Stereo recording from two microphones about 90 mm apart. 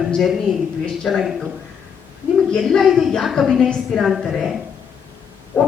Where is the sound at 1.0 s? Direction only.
Centre (ahead or behind).